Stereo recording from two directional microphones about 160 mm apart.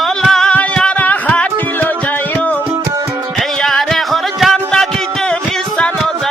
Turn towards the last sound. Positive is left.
turn(degrees=5)  # may be behind; listen again after turning